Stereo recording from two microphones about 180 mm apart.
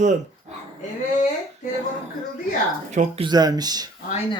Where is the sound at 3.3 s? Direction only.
20° right (ahead or behind).